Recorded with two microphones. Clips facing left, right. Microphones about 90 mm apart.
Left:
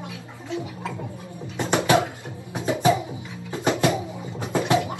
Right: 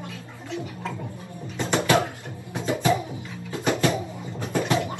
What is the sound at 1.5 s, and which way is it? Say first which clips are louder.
Music: left 2 dB; 15° left (ahead or behind).